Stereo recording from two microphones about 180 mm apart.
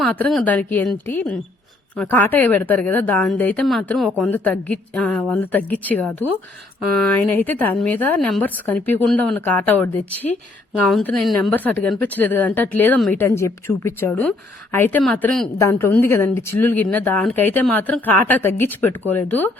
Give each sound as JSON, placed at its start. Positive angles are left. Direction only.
{"t": 0.0, "sound": "speech", "side_deg": 5}